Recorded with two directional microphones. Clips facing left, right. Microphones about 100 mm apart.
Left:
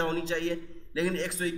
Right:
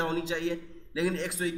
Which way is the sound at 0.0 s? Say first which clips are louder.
Left 1 dB; 5° right (ahead or behind).